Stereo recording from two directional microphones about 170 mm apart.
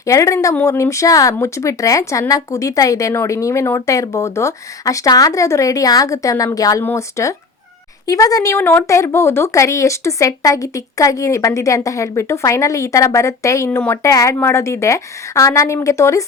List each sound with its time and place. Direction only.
0.0 s speech: 20° left (ahead or behind)